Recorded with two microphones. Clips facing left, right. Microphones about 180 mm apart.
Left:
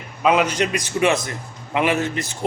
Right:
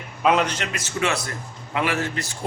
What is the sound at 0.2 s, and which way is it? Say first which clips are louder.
Speech: left 2 dB; 5° left (ahead or behind).